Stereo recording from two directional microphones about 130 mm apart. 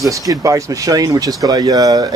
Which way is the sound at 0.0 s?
25° right (ahead or behind).